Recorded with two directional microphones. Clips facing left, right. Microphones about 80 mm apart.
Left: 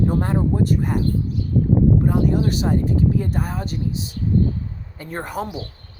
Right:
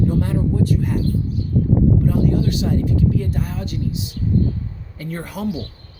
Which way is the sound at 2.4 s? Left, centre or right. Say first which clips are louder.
Even; left.